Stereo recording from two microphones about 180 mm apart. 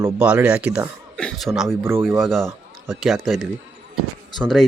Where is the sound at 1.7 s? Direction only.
15° right (ahead or behind).